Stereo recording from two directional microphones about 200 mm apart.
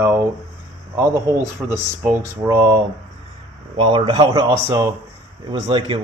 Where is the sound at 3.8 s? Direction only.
25° right (ahead or behind).